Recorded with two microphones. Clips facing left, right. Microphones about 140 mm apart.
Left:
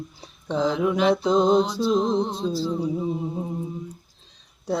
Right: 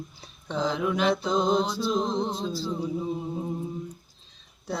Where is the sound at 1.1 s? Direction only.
30° left (ahead or behind).